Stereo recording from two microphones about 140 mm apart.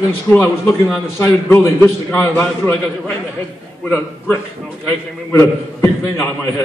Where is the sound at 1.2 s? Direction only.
20° left (ahead or behind).